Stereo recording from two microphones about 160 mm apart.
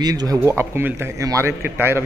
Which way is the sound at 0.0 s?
25° right (ahead or behind).